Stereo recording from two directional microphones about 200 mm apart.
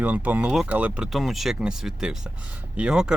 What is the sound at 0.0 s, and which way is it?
Speech, 5° right (ahead or behind).